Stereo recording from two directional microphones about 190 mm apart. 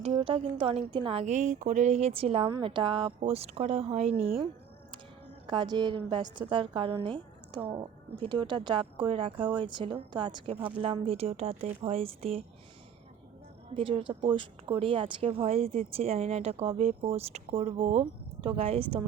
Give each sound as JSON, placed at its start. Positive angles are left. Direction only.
{"t": 0.0, "sound": "a woman's voice", "side_deg": -30}
{"t": 5.5, "sound": "a woman's voice", "side_deg": -25}
{"t": 13.7, "sound": "speech", "side_deg": -30}